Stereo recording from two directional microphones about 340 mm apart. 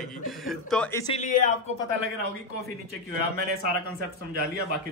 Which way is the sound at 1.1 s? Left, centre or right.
Left.